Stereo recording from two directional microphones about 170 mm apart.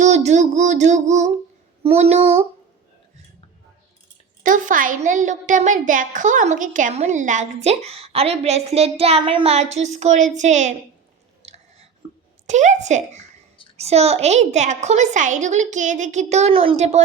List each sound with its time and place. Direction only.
0.0 s a woman's voice: 40° right (ahead or behind)
4.4 s a woman's voice: 50° right (ahead or behind)
11.4 s chewing: 40° right (ahead or behind)
12.5 s a woman's voice: 45° right (ahead or behind)